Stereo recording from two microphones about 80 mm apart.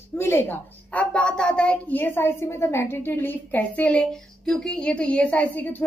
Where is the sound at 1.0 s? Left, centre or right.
Centre.